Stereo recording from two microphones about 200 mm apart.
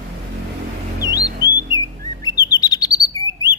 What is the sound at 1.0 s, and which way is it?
Music, 20° left (ahead or behind).